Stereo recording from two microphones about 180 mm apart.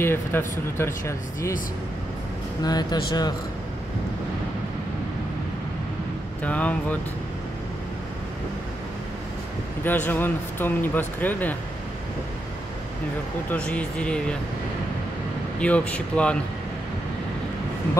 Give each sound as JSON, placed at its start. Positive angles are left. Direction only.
{"t": 0.0, "sound": "speech", "side_deg": 10}
{"t": 2.6, "sound": "speech", "side_deg": 25}
{"t": 6.4, "sound": "speech", "side_deg": 10}
{"t": 9.8, "sound": "speech", "side_deg": 10}
{"t": 13.5, "sound": "speech", "side_deg": 5}
{"t": 15.6, "sound": "speech", "side_deg": 5}